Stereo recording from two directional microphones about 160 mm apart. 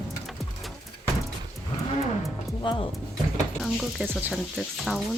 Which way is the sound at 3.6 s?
Centre (ahead or behind).